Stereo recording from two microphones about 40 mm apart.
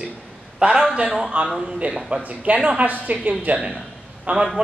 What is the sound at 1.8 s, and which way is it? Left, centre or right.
A woman's voice, right.